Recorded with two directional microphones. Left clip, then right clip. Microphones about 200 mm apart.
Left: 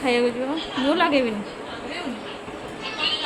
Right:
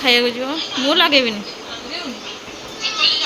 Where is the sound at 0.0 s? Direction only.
Centre (ahead or behind).